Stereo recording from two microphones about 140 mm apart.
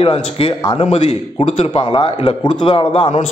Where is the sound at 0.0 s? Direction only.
40° left (ahead or behind).